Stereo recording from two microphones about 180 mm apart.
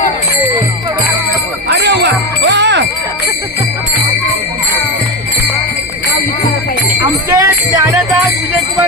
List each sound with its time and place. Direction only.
1.7 s jingle bell: 75° right (ahead or behind)
7.0 s music: 20° right (ahead or behind)